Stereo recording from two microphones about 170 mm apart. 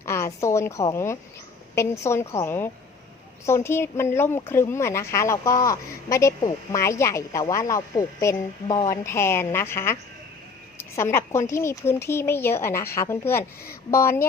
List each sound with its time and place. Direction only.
0.0 s a woman's voice: 15° left (ahead or behind)